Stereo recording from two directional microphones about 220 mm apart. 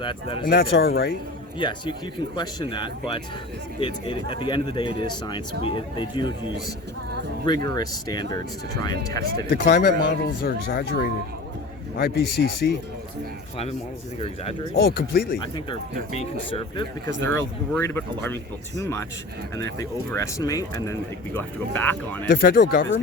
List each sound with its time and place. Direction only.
0.0 s speech: 25° left (ahead or behind)
0.4 s speech: 45° left (ahead or behind)
1.5 s speech: 20° left (ahead or behind)
7.4 s speech: 20° left (ahead or behind)
9.6 s speech: 50° left (ahead or behind)
14.2 s speech: 25° left (ahead or behind)
14.8 s speech: 45° left (ahead or behind)
15.5 s speech: 25° left (ahead or behind)
17.2 s speech: 10° left (ahead or behind)
22.3 s speech: 40° left (ahead or behind)